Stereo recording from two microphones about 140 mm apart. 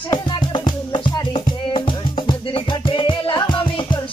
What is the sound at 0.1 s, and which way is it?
Music, 35° left (ahead or behind).